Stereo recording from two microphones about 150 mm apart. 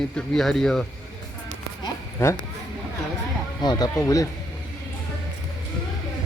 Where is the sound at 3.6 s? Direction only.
25° left (ahead or behind).